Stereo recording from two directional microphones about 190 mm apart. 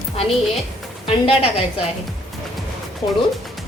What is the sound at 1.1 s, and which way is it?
Speech, 30° left (ahead or behind).